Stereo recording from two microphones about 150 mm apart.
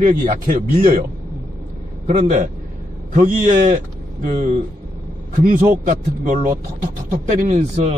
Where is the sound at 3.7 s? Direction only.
60° right (ahead or behind).